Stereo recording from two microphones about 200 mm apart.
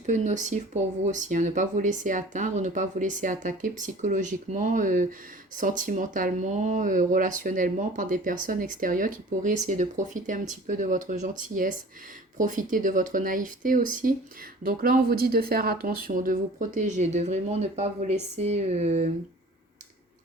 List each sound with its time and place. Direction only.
0.0 s speech: 35° right (ahead or behind)